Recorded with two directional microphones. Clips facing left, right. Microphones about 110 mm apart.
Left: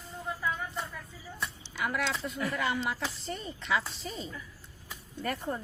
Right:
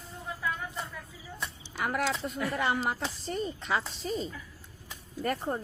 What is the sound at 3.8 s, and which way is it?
Speech, centre (ahead or behind).